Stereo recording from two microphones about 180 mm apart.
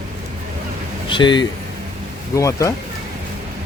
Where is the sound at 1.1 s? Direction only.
25° left (ahead or behind).